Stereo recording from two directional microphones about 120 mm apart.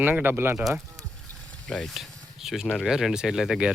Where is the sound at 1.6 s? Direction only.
5° left (ahead or behind).